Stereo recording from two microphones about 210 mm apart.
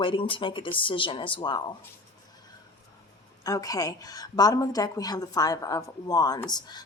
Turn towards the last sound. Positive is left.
turn(degrees=20)  # may be behind; listen again after turning